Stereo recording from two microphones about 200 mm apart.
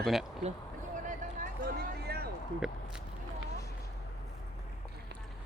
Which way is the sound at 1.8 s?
50° right (ahead or behind).